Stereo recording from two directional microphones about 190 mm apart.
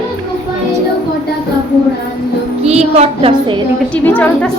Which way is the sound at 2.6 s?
35° right (ahead or behind).